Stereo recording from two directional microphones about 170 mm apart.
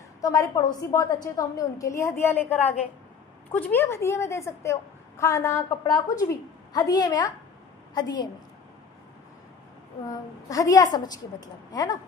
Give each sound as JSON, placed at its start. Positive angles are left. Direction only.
{"t": 0.2, "sound": "a woman's voice", "side_deg": 20}
{"t": 10.0, "sound": "a woman's voice", "side_deg": 20}